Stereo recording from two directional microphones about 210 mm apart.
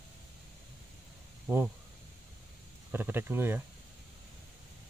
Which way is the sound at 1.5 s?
15° right (ahead or behind).